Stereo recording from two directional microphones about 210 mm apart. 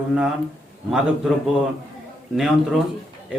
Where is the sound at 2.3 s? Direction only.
Centre (ahead or behind).